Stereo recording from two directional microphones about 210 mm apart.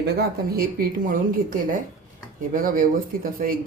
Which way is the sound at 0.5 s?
45° right (ahead or behind).